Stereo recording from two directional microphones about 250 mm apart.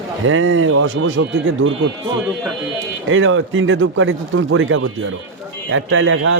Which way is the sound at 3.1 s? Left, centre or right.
Right.